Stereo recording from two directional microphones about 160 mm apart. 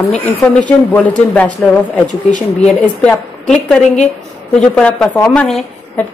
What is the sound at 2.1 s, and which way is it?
Speech, 50° left (ahead or behind).